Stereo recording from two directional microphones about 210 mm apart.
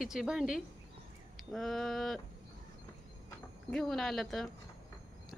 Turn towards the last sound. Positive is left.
turn(degrees=0)  # may be behind; listen again after turning